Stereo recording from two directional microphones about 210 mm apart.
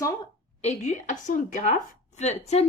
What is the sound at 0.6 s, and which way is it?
Speech, 30° left (ahead or behind).